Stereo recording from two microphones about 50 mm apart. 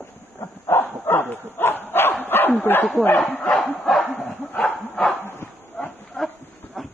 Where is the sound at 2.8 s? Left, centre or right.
Left.